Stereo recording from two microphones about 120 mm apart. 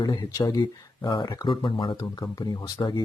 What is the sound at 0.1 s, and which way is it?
Speech, 30° left (ahead or behind).